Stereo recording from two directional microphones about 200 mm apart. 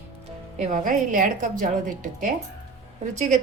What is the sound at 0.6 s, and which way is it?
A woman's voice, 40° right (ahead or behind).